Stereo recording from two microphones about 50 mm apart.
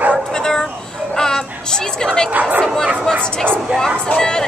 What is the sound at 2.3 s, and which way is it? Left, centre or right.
Speech, right.